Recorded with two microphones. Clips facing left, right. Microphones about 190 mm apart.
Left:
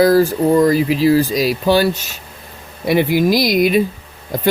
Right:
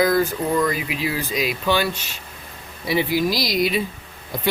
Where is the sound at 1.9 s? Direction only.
10° left (ahead or behind).